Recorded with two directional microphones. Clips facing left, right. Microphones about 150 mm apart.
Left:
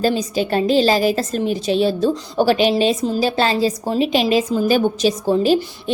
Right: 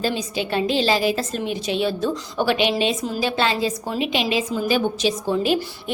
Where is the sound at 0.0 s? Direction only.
40° left (ahead or behind).